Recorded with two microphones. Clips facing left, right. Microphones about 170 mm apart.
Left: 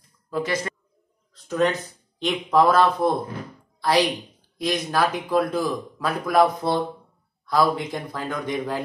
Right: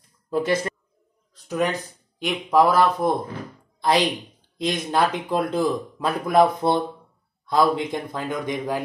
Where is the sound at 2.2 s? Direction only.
10° right (ahead or behind).